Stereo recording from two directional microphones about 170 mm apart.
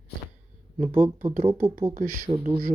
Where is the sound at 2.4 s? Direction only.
60° right (ahead or behind).